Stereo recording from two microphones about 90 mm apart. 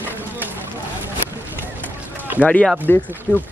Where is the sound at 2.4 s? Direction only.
15° left (ahead or behind).